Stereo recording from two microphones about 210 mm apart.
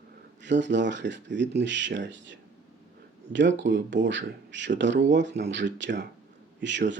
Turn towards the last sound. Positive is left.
turn(degrees=-60)  # may be behind; listen again after turning